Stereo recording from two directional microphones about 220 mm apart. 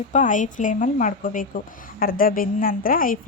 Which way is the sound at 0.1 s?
35° left (ahead or behind).